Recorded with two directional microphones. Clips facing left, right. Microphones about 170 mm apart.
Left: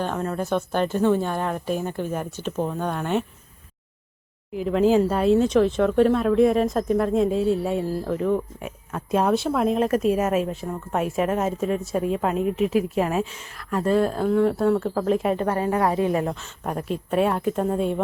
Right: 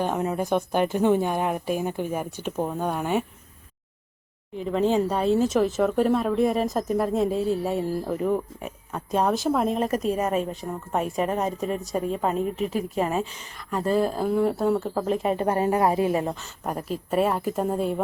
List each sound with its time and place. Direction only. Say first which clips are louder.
0.0 s speech: right 1 dB; 15° right (ahead or behind)
4.5 s speech: left 4 dB; centre (ahead or behind)
15.4 s a woman's voice: right 1 dB; 25° right (ahead or behind)
15.8 s speech: even; 10° right (ahead or behind)